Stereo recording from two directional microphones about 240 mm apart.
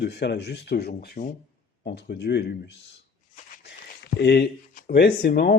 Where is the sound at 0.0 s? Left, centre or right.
Left.